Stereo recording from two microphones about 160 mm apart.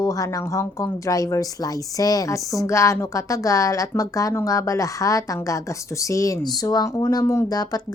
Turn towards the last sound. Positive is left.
turn(degrees=25)  # may be behind; listen again after turning